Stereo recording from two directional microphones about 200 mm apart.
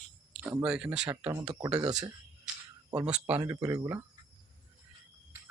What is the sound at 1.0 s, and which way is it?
Speech, 15° right (ahead or behind).